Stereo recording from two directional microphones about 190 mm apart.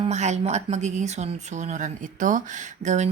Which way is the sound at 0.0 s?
35° right (ahead or behind).